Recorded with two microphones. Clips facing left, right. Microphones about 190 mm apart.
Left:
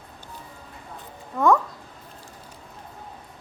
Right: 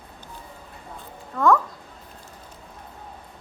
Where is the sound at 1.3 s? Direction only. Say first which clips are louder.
Even; 15° left (ahead or behind).